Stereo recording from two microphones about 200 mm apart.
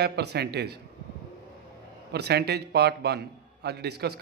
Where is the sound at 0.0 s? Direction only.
55° right (ahead or behind).